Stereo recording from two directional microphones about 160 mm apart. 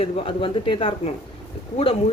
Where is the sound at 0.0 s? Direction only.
35° left (ahead or behind).